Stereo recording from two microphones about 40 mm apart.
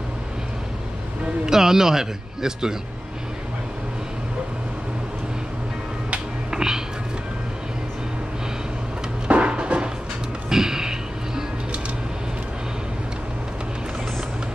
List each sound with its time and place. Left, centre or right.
1.4 s speech: centre
6.5 s a sound: centre
9.3 s music: right
10.5 s music: centre